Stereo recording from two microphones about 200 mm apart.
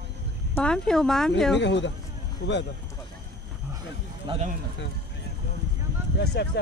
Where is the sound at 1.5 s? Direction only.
60° left (ahead or behind).